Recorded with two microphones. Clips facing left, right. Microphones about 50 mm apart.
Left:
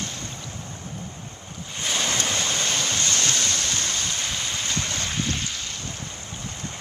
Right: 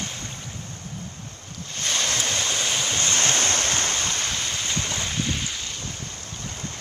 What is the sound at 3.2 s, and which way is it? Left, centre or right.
Waves, right.